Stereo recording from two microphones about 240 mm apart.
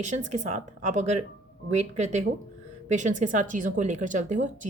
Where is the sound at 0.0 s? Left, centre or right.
Right.